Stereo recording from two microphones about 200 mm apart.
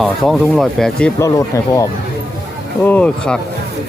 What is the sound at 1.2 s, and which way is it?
Speech, 15° left (ahead or behind).